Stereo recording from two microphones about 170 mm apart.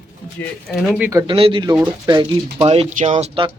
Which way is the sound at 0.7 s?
Centre (ahead or behind).